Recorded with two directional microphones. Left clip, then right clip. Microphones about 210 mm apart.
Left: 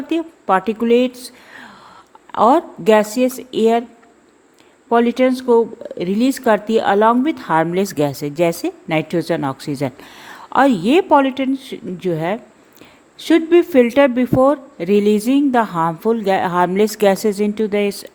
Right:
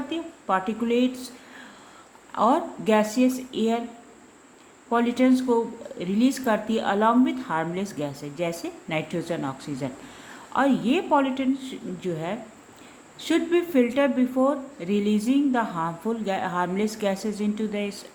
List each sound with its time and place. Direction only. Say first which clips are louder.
0.1 s a woman's voice: left 10 dB; 45° left (ahead or behind)
4.9 s speech: left 8 dB; 45° left (ahead or behind)